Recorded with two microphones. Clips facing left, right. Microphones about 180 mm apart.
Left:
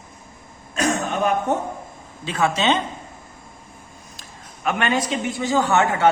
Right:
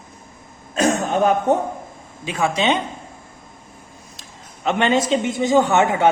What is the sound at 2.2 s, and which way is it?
Speech, 10° right (ahead or behind).